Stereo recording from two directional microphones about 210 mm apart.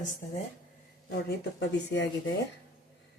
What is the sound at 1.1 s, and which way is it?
Speech, 50° left (ahead or behind).